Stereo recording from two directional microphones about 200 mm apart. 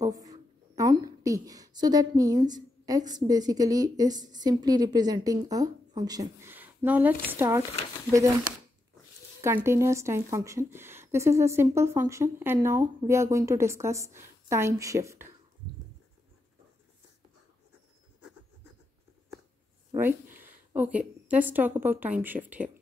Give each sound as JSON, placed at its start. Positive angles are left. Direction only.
{"t": 0.0, "sound": "a woman's voice", "side_deg": -20}
{"t": 9.4, "sound": "a woman's voice", "side_deg": -10}
{"t": 20.0, "sound": "speech", "side_deg": -10}